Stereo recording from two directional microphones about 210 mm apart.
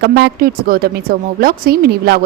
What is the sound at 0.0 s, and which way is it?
Speech, 50° right (ahead or behind).